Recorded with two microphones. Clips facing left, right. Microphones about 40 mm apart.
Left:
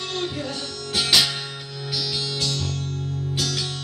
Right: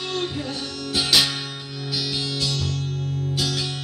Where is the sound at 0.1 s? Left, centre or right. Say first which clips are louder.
Right 1 dB; centre.